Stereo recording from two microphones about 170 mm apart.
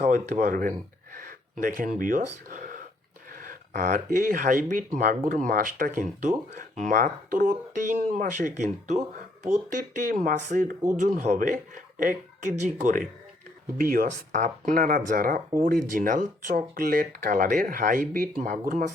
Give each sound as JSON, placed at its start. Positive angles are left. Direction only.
{"t": 0.0, "sound": "speech", "side_deg": -55}
{"t": 1.1, "sound": "gasp", "side_deg": -55}
{"t": 3.3, "sound": "speech", "side_deg": -55}